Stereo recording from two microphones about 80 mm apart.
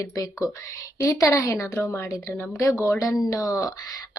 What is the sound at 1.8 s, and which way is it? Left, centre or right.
Speech, left.